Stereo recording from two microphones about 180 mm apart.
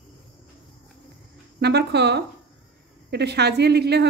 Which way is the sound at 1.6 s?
65° right (ahead or behind).